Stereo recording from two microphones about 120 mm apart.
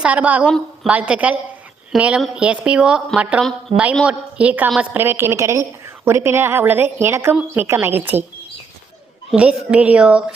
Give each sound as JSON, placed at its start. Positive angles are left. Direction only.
{"t": 0.0, "sound": "a woman's voice", "side_deg": -10}
{"t": 9.3, "sound": "a woman's voice", "side_deg": -10}